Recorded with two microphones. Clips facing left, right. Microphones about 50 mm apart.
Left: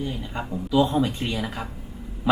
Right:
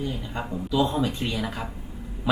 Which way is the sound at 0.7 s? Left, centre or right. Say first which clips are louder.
Left 3 dB; centre.